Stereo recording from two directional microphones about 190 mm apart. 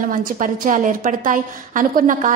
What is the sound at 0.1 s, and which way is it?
A woman's voice, 45° right (ahead or behind).